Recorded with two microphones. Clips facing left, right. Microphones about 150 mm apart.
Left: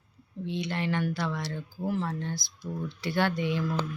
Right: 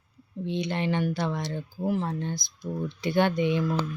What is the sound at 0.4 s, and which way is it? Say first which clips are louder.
Speech: right 3 dB; 20° right (ahead or behind).